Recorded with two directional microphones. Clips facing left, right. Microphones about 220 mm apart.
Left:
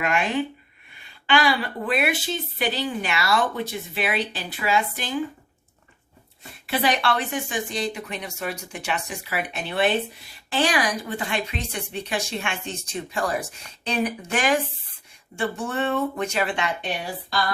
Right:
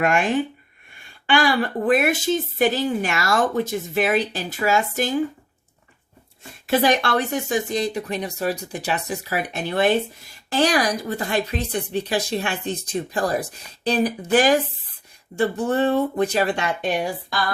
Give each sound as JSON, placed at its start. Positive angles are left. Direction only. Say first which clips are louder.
{"t": 0.0, "sound": "a woman's voice", "louder": "right 4 dB", "side_deg": -50}
{"t": 6.8, "sound": "speech", "louder": "even", "side_deg": -45}